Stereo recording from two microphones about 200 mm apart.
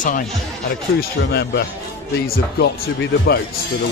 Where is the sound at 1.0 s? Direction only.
55° left (ahead or behind).